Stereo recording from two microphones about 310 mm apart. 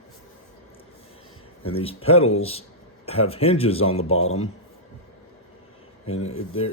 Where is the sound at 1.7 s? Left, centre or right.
Centre.